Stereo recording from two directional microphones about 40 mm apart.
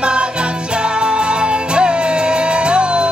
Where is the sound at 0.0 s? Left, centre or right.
Right.